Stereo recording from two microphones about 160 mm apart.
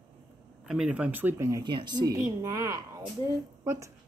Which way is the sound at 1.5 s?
30° right (ahead or behind).